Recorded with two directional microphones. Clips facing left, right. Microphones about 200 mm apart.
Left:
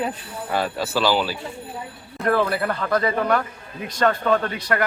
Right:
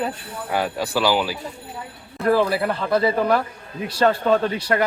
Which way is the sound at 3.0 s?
30° right (ahead or behind).